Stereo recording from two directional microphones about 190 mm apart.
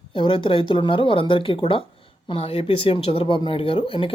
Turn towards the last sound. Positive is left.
turn(degrees=25)  # may be behind; listen again after turning